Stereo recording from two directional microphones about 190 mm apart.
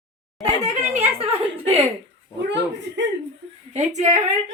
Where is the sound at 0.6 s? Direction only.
35° right (ahead or behind).